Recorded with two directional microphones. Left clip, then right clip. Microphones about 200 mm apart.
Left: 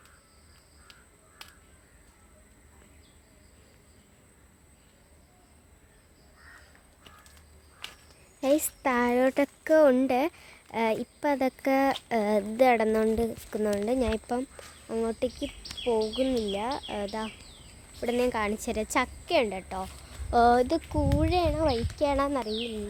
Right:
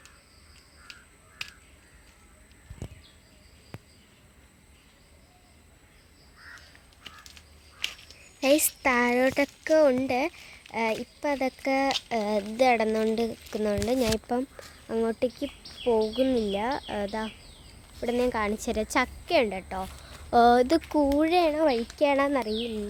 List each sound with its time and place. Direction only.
8.4 s a sound: 5° right (ahead or behind)
8.8 s speech: 5° left (ahead or behind); by 20.7 s 10° right (ahead or behind)
20.7 s speech: 20° right (ahead or behind)
21.2 s speech: 15° right (ahead or behind)